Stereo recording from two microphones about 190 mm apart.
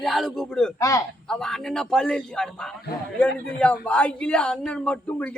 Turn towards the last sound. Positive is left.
turn(degrees=5)  # may be behind; listen again after turning